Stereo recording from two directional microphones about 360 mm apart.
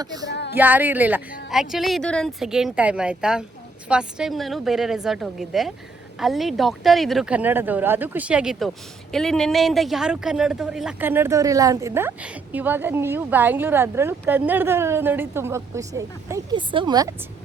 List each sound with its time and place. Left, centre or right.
0.0 s speech: centre
0.3 s a sound: left
0.5 s speech: centre